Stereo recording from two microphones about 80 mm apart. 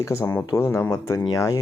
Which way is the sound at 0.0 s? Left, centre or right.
Left.